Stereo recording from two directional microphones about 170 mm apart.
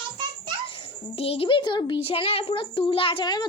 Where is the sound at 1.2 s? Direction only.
35° left (ahead or behind).